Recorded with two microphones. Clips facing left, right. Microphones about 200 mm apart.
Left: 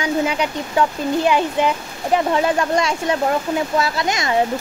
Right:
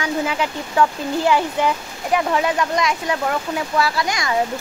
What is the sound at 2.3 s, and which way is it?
Speech, 30° left (ahead or behind).